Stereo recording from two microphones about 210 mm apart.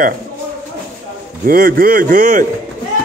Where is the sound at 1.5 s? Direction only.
45° right (ahead or behind).